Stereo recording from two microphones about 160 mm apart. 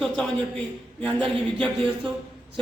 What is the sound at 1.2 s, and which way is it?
Speech, 35° right (ahead or behind).